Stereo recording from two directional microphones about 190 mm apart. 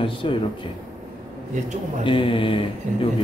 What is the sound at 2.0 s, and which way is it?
Speech, 25° left (ahead or behind).